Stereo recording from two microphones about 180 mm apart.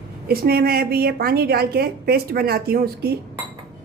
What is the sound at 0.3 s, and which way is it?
A woman's voice, 60° right (ahead or behind).